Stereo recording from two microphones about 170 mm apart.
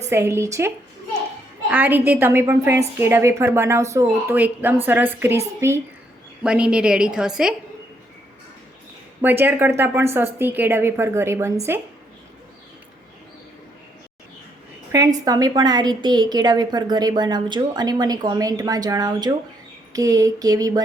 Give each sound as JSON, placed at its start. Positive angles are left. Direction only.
{"t": 0.1, "sound": "a woman's voice", "side_deg": -15}
{"t": 1.7, "sound": "a woman's voice", "side_deg": -10}
{"t": 9.2, "sound": "a woman's voice", "side_deg": -10}
{"t": 14.9, "sound": "a woman's voice", "side_deg": -20}